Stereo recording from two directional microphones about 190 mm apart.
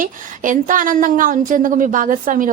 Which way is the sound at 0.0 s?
45° right (ahead or behind).